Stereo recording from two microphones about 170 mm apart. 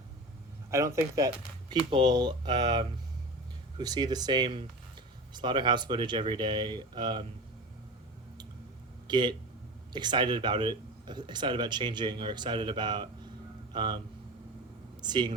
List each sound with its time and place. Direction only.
0.7 s speech: 15° right (ahead or behind)
9.0 s speech: 25° right (ahead or behind)
15.0 s speech: 25° right (ahead or behind)